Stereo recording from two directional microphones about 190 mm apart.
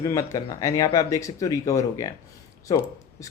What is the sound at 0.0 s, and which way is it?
Speech, 20° left (ahead or behind).